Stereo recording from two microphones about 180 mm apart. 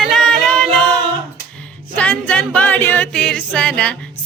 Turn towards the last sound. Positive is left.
turn(degrees=5)  # may be behind; listen again after turning